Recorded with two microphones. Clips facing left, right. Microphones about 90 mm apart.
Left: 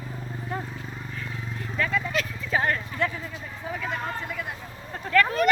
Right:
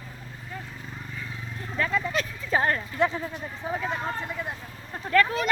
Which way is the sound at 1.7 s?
20° right (ahead or behind).